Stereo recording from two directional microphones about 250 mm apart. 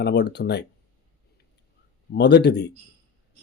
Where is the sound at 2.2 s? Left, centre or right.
Left.